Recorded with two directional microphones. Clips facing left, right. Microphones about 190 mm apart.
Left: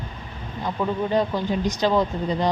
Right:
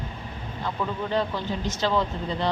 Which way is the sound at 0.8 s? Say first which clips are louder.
Left 5 dB; 20° left (ahead or behind).